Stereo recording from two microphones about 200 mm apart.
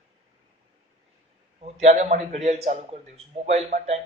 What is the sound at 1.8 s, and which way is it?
A man's voice, 35° right (ahead or behind).